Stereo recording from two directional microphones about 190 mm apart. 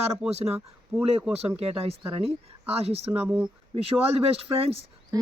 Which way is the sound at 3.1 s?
5° right (ahead or behind).